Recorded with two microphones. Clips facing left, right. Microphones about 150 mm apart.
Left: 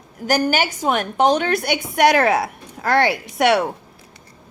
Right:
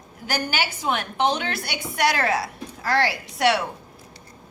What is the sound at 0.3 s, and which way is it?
A woman's voice, 45° left (ahead or behind).